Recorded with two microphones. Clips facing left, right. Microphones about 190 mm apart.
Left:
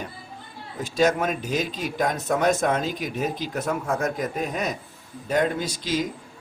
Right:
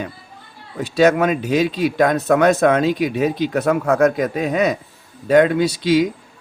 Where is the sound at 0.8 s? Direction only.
70° right (ahead or behind).